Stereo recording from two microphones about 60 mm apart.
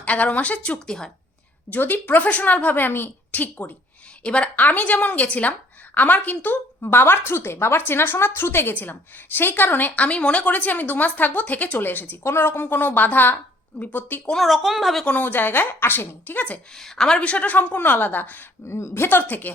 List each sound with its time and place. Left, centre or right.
0.0 s a woman's voice: left
0.9 s a woman's voice: centre
1.7 s a woman's voice: left
14.3 s a woman's voice: centre
15.0 s a woman's voice: left
16.7 s a woman's voice: centre
17.2 s a woman's voice: left
18.7 s speech: left
19.0 s a woman's voice: left